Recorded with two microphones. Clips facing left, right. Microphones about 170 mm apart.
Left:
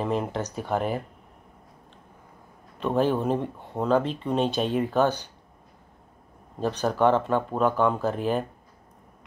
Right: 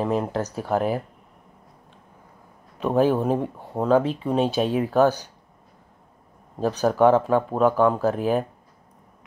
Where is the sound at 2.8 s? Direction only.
10° right (ahead or behind).